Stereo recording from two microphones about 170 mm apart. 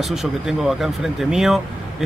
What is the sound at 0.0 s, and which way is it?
Speech, centre (ahead or behind).